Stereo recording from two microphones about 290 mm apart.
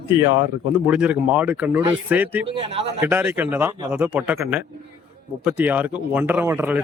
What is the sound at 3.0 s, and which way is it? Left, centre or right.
A man's voice, centre.